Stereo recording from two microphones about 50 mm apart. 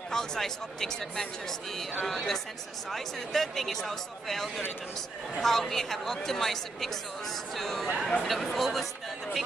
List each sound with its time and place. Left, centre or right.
0.1 s speech: centre